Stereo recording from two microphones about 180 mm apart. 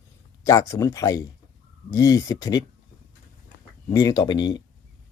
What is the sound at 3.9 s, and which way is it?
Speech, 20° left (ahead or behind).